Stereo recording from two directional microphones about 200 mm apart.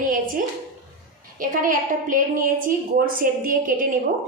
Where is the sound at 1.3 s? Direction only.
45° right (ahead or behind).